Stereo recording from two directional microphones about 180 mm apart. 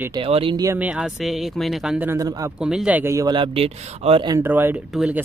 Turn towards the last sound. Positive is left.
turn(degrees=-5)  # may be behind; listen again after turning